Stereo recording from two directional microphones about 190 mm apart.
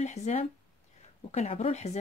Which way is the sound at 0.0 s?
35° left (ahead or behind).